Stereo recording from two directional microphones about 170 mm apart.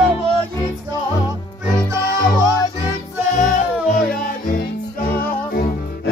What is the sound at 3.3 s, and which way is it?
Music, 50° left (ahead or behind).